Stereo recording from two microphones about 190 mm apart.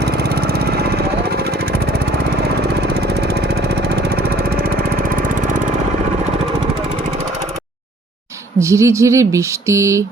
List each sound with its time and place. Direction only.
0.0 s lawn mower: 55° right (ahead or behind)
2.8 s jackhammer: 55° right (ahead or behind)
8.5 s speech: 15° right (ahead or behind)